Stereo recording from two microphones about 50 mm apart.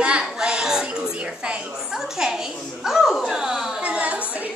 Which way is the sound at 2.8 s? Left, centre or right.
Centre.